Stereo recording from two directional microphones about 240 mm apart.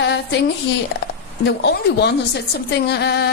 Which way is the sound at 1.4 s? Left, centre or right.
Left.